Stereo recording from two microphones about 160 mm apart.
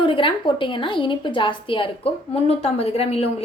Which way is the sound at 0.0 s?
35° left (ahead or behind).